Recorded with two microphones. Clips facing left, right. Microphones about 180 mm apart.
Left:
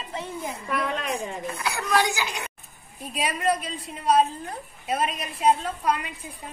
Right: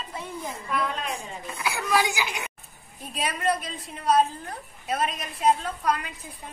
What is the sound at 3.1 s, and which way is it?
A woman's voice, 5° left (ahead or behind).